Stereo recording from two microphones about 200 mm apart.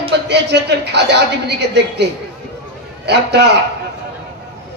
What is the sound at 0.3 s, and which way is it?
Speech, 55° right (ahead or behind).